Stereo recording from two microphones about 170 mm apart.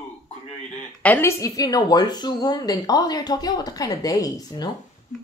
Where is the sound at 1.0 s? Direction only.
10° left (ahead or behind).